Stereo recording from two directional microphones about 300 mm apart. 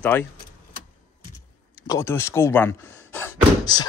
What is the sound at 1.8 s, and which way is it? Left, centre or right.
Speech, centre.